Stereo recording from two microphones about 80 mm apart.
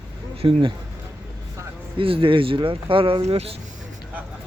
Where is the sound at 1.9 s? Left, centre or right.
Right.